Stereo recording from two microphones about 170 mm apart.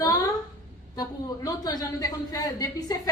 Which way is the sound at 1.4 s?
20° left (ahead or behind).